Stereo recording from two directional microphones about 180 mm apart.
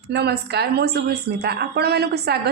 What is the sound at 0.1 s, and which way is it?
A woman's voice, 65° right (ahead or behind).